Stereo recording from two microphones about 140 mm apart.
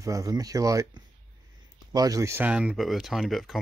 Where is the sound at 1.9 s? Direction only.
25° right (ahead or behind); by 3.5 s centre (ahead or behind).